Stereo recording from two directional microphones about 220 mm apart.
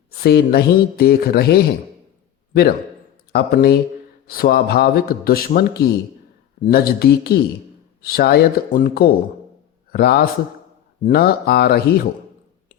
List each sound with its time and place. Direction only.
0.2 s a man's voice: 45° left (ahead or behind)